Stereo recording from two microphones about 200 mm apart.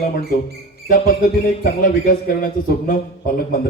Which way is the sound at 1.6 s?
45° left (ahead or behind).